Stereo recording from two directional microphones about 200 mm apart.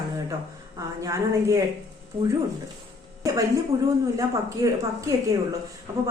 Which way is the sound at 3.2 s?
15° right (ahead or behind).